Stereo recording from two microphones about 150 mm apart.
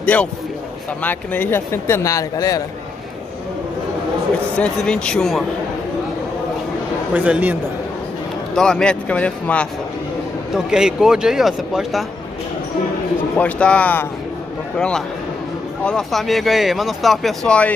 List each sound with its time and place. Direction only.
0.0 s a man's voice: 10° left (ahead or behind)
4.6 s speech: 5° left (ahead or behind)
7.2 s a man's voice: 10° right (ahead or behind)
8.5 s speech: 5° left (ahead or behind)
10.5 s speech: 5° right (ahead or behind)
13.4 s speech: 10° left (ahead or behind)